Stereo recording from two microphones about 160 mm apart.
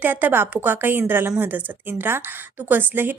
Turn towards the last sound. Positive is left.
turn(degrees=-10)  # may be behind; listen again after turning